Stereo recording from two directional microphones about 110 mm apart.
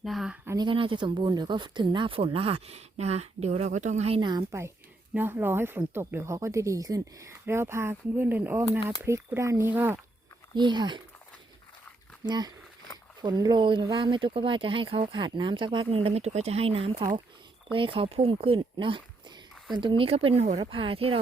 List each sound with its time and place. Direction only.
0.0 s speech: centre (ahead or behind)
0.5 s speech: 45° right (ahead or behind); by 4.2 s 80° right
4.2 s speech: 45° right (ahead or behind)
5.1 s speech: 20° right (ahead or behind)
10.5 s speech: 45° right (ahead or behind)
12.2 s speech: 40° right (ahead or behind); by 16.9 s 65° right (ahead or behind)
17.7 s speech: 55° right (ahead or behind); by 20.7 s 85° right
20.7 s speech: 55° right (ahead or behind)